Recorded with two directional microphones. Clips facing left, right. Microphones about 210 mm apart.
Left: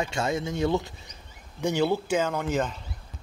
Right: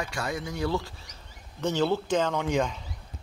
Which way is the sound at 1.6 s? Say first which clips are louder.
Left 1 dB; 10° left (ahead or behind).